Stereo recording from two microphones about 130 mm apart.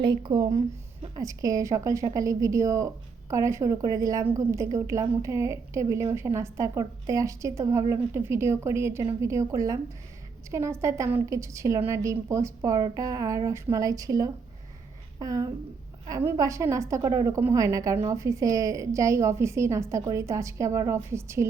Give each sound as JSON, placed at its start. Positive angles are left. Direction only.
{"t": 0.0, "sound": "a woman's voice", "side_deg": -40}